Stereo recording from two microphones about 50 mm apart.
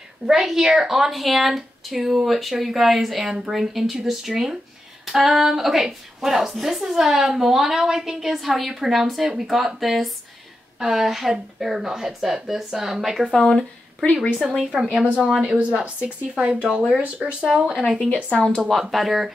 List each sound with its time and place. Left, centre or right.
0.3 s a woman's voice: centre
13.3 s speech: centre
14.6 s a woman's voice: centre
15.6 s speech: right
17.9 s speech: left
18.7 s speech: centre